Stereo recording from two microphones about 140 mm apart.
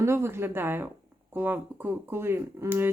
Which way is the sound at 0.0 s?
20° right (ahead or behind).